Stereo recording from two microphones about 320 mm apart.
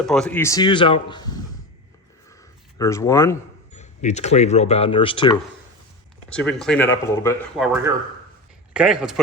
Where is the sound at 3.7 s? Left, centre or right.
Left.